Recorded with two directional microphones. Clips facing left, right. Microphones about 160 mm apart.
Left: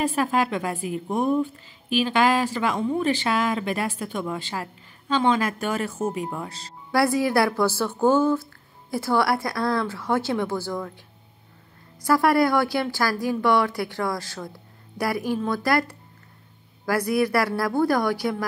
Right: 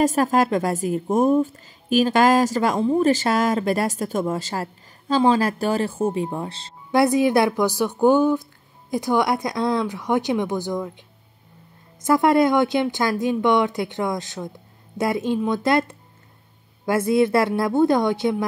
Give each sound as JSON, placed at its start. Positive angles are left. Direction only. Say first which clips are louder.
{"t": 0.0, "sound": "a woman's voice", "louder": "right 5 dB", "side_deg": -40}